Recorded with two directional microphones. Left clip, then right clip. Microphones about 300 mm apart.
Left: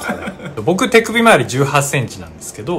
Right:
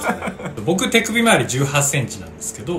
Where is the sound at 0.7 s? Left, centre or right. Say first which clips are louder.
Left 5 dB; centre.